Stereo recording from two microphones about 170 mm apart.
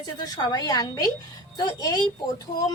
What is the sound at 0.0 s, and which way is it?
A woman's voice, 20° left (ahead or behind).